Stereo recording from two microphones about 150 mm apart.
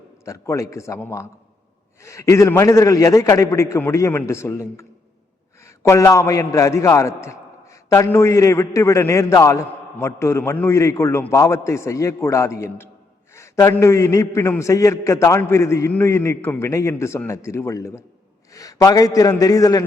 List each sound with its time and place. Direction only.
0.3 s a man's voice: 20° left (ahead or behind)
5.6 s a man's voice: 20° left (ahead or behind)